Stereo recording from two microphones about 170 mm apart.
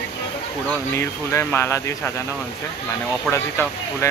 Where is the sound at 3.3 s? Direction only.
15° left (ahead or behind).